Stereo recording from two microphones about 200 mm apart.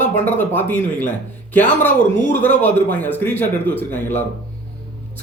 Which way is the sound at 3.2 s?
10° left (ahead or behind).